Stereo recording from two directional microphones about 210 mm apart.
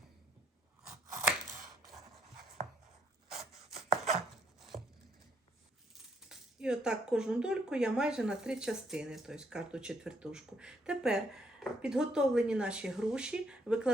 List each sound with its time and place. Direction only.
3.2 s chopping: centre (ahead or behind)
4.7 s a sound: 30° right (ahead or behind)
6.2 s speech: 5° right (ahead or behind)